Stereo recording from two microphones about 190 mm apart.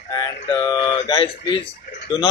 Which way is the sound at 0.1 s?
20° left (ahead or behind).